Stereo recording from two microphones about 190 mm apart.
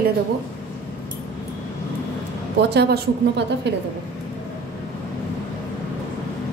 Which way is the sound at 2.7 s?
55° right (ahead or behind).